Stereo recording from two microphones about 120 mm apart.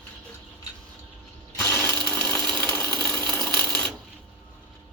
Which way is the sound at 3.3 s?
5° left (ahead or behind).